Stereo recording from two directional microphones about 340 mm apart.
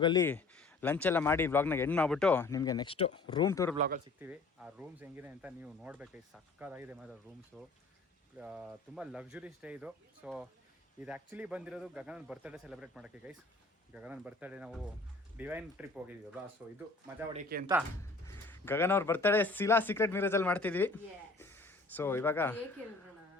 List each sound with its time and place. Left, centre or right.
0.0 s speech: centre
4.2 s speech: centre
17.3 s speech: right
18.4 s speech: centre